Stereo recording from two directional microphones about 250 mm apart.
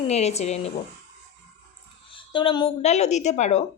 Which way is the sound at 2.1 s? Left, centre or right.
Left.